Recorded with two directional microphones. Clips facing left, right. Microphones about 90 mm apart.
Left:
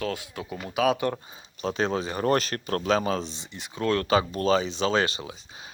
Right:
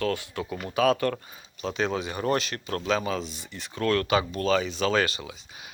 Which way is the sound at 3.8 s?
25° left (ahead or behind).